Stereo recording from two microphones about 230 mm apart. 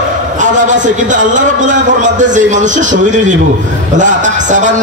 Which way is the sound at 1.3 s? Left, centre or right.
Right.